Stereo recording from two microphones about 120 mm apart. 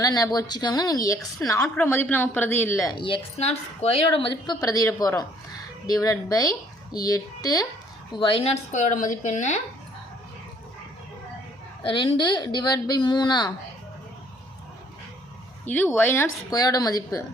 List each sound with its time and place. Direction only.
0.0 s speech: 30° left (ahead or behind)
2.9 s a woman's voice: 45° left (ahead or behind)
3.3 s a woman's voice: 60° left (ahead or behind)
4.6 s speech: 30° left (ahead or behind)
8.1 s speech: 45° left (ahead or behind); by 9.6 s 90° left
11.8 s speech: 45° left (ahead or behind)
15.6 s speech: 15° left (ahead or behind)
16.5 s speech: 30° left (ahead or behind)